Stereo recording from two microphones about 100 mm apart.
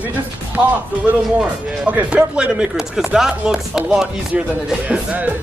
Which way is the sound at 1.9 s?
15° right (ahead or behind).